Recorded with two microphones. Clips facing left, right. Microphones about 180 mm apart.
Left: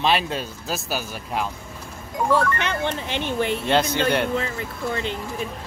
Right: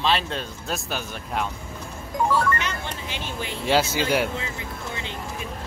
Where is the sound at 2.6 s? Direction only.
60° left (ahead or behind).